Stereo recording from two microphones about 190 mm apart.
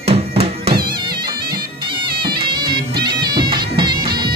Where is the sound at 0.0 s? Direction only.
30° right (ahead or behind).